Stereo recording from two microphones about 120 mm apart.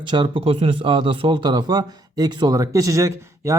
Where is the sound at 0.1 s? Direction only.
45° right (ahead or behind).